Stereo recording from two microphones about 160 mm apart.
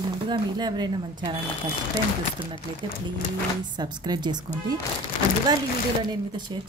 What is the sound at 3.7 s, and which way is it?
Speech, 25° right (ahead or behind).